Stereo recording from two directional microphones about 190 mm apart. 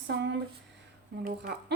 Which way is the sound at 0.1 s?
70° right (ahead or behind).